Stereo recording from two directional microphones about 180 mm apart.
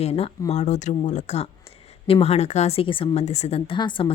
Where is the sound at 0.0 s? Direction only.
35° left (ahead or behind).